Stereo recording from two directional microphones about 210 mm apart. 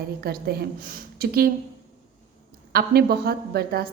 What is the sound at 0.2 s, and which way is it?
A woman's voice, 50° right (ahead or behind).